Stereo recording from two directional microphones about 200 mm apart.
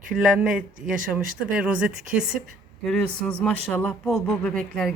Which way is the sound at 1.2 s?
40° right (ahead or behind).